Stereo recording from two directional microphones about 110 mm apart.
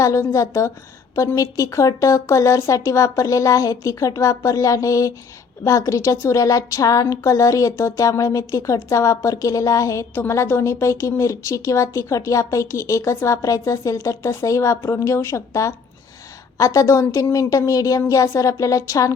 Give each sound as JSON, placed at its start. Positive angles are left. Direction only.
{"t": 0.0, "sound": "a woman's voice", "side_deg": 25}